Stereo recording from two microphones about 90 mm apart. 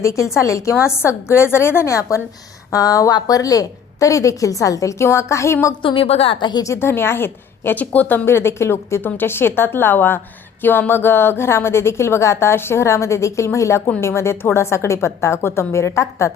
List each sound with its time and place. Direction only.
0.0 s a woman's voice: 35° left (ahead or behind)
5.8 s a woman's voice: 80° left
6.6 s a woman's voice: 30° left (ahead or behind)